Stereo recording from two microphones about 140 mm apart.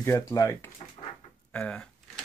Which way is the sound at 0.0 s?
20° left (ahead or behind).